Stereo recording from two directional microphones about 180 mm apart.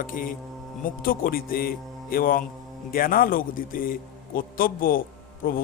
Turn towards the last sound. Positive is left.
turn(degrees=50)  # may be behind; listen again after turning